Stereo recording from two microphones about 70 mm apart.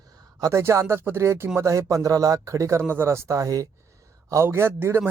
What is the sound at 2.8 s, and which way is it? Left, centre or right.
Speech, right.